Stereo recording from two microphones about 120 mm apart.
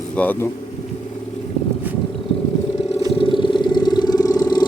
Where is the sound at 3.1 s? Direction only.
45° left (ahead or behind).